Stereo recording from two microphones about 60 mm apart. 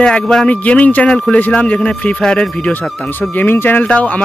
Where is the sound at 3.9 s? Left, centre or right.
Centre.